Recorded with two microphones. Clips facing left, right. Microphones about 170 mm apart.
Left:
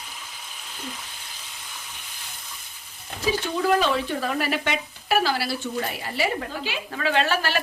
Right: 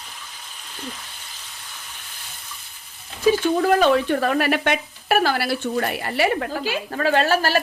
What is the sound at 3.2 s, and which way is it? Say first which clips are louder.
Speech: right 6 dB; 50° right (ahead or behind).